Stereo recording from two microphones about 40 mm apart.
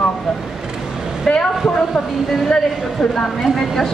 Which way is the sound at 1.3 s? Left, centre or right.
Centre.